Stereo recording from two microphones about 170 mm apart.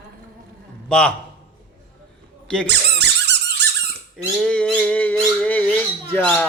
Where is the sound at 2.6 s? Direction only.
90° right.